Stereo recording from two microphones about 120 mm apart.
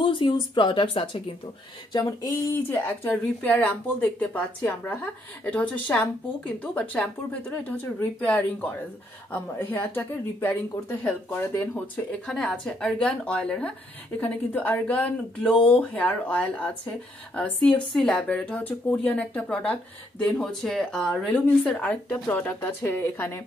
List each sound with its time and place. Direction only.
0.0 s a woman's voice: 40° left (ahead or behind)
1.9 s a sound: 30° left (ahead or behind)
2.7 s speech: 20° left (ahead or behind)
12.3 s speech: 5° left (ahead or behind); by 23.4 s 20° left (ahead or behind)